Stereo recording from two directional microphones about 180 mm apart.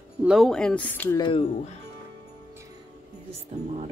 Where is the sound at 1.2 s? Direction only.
30° left (ahead or behind).